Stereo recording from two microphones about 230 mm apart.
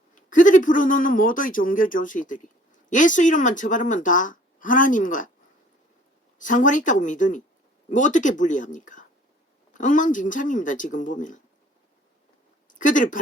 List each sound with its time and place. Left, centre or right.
0.1 s speech: left
6.4 s speech: left
12.8 s speech: left